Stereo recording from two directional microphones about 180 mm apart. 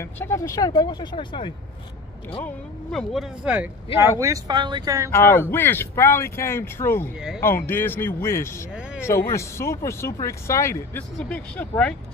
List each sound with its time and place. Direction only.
0.0 s speech: 15° left (ahead or behind)
2.4 s speech: 5° left (ahead or behind)
4.2 s speech: 20° right (ahead or behind)
5.1 s speech: 15° left (ahead or behind)